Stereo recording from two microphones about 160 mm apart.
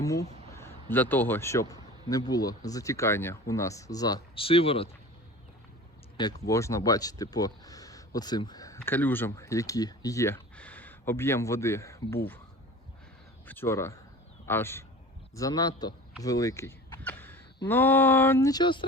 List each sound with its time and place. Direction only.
0.0 s speech: 20° left (ahead or behind)
4.4 s speech: 35° left (ahead or behind)
6.5 s speech: 20° left (ahead or behind)
13.5 s speech: 15° left (ahead or behind)
16.2 s a sound: 20° left (ahead or behind)
17.7 s speech: 10° left (ahead or behind); by 18.9 s 30° left (ahead or behind)